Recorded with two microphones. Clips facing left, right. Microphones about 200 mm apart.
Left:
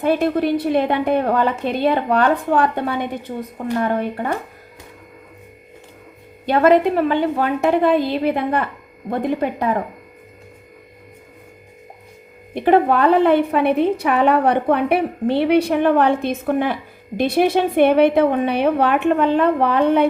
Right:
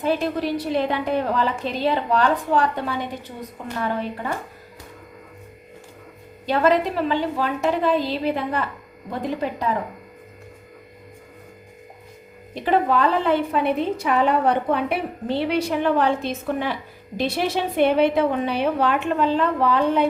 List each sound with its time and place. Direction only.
0.0 s a woman's voice: 60° left (ahead or behind)
6.4 s a woman's voice: 55° left (ahead or behind)
12.5 s a woman's voice: 55° left (ahead or behind)